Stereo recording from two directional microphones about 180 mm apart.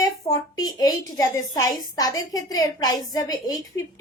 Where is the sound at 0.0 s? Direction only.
20° left (ahead or behind).